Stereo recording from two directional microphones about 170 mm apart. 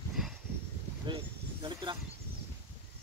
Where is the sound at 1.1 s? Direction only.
30° right (ahead or behind).